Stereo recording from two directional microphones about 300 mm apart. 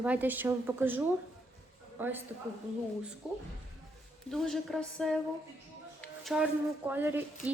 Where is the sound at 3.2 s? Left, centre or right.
Centre.